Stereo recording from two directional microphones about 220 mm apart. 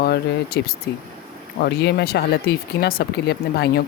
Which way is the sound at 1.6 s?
45° left (ahead or behind).